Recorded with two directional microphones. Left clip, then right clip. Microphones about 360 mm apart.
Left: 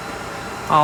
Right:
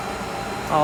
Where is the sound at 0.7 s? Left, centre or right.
Centre.